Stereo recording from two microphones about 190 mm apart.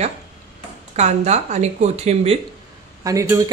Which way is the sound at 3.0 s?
15° right (ahead or behind).